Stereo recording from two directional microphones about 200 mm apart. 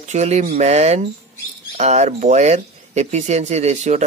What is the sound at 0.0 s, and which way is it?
Speech, 35° right (ahead or behind).